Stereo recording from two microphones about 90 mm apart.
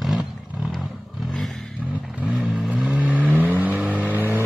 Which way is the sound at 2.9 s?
15° right (ahead or behind).